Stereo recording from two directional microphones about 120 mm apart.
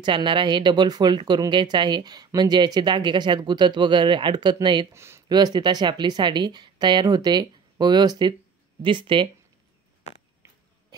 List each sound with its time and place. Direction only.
0.0 s speech: 40° right (ahead or behind)
4.9 s speech: 20° right (ahead or behind)
5.3 s speech: 35° right (ahead or behind)